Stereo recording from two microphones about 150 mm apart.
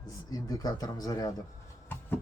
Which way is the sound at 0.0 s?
25° left (ahead or behind).